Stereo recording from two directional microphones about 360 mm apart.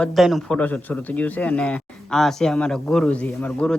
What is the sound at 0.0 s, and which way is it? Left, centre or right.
A man's voice, centre.